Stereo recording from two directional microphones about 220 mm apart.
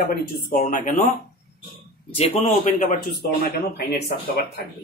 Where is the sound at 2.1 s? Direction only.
35° left (ahead or behind).